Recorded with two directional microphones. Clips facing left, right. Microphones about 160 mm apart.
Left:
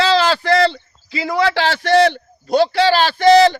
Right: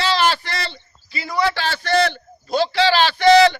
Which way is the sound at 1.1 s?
90° left.